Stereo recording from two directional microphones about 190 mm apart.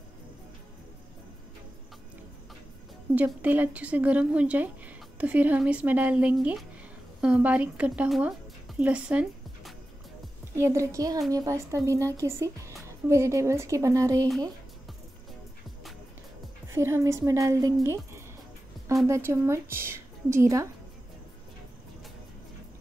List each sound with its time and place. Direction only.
3.2 s speech: 10° right (ahead or behind)
10.5 s speech: 15° right (ahead or behind)
16.6 s speech: 15° right (ahead or behind)